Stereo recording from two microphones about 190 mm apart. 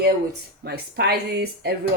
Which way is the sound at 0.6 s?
60° right (ahead or behind).